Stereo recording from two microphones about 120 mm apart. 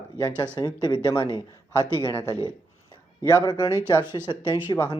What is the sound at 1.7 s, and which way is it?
Speech, 25° right (ahead or behind).